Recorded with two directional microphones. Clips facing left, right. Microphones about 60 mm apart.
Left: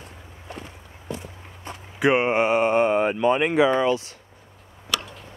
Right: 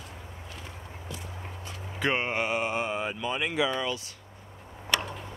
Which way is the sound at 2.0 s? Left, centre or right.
Centre.